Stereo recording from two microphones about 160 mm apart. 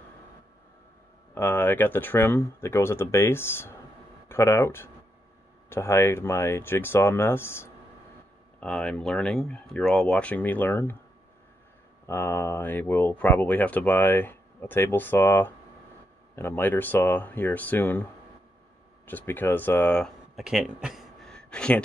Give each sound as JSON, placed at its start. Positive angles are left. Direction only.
{"t": 1.3, "sound": "speech", "side_deg": 10}
{"t": 12.1, "sound": "speech", "side_deg": 15}
{"t": 19.0, "sound": "speech", "side_deg": 10}